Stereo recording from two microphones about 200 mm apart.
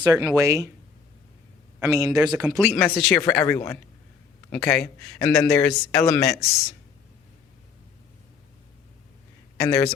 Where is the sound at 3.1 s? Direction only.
10° left (ahead or behind).